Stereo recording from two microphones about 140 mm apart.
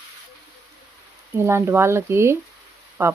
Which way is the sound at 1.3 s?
20° right (ahead or behind).